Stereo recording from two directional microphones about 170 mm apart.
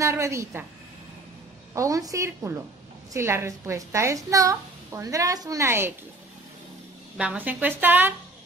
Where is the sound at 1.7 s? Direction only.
20° right (ahead or behind).